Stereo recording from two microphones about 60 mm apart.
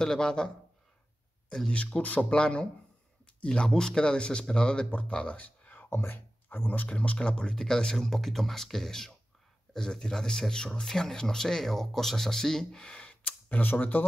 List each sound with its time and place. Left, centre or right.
0.0 s a man's voice: centre
1.7 s a man's voice: left
5.9 s speech: left
6.9 s a man's voice: centre